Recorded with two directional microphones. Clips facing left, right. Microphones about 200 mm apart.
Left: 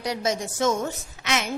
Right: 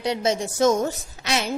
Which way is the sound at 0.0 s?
25° right (ahead or behind).